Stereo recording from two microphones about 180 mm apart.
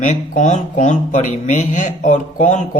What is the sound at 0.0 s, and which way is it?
Speech, 45° left (ahead or behind).